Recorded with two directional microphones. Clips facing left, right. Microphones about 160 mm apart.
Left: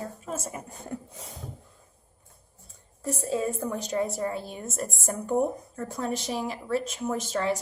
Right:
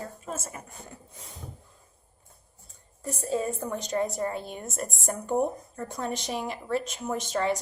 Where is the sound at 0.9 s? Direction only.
85° left.